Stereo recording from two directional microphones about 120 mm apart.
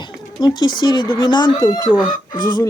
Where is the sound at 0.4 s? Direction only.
40° left (ahead or behind).